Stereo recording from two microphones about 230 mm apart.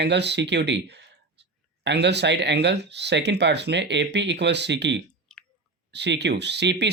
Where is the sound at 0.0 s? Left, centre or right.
Right.